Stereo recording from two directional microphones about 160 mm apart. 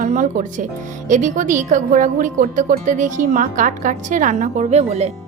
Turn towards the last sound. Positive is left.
turn(degrees=-45)  # may be behind; listen again after turning